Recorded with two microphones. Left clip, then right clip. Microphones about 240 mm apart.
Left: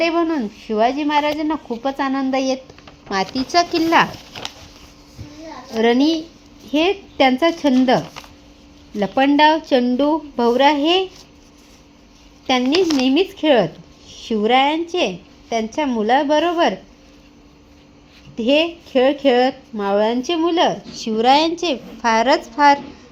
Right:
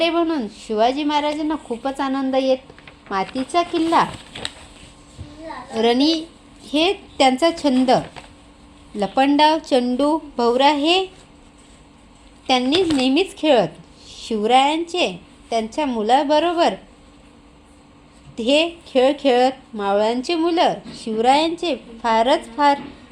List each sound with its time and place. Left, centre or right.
0.0 s speech: left
5.7 s speech: centre
12.5 s speech: centre
18.3 s speech: left